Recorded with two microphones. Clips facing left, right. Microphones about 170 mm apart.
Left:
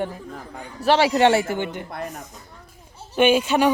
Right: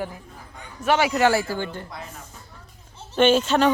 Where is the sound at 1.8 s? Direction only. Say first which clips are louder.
Left 7 dB; 55° left (ahead or behind).